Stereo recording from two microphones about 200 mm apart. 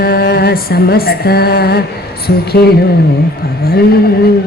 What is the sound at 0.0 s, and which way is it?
Music, 50° left (ahead or behind).